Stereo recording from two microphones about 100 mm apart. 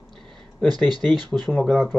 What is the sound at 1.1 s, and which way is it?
Speech, 45° right (ahead or behind).